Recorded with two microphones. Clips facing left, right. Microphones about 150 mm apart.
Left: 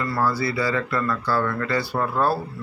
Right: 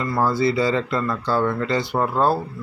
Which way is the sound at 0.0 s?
20° right (ahead or behind).